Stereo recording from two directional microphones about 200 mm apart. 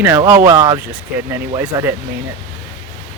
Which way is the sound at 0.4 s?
20° right (ahead or behind).